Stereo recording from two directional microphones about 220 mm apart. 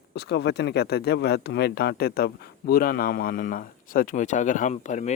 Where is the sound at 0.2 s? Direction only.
50° left (ahead or behind).